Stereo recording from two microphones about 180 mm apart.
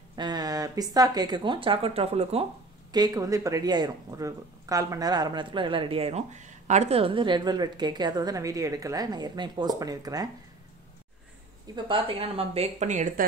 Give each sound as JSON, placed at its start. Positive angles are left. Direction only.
{"t": 0.1, "sound": "speech", "side_deg": -20}
{"t": 2.9, "sound": "speech", "side_deg": -20}
{"t": 11.7, "sound": "speech", "side_deg": -30}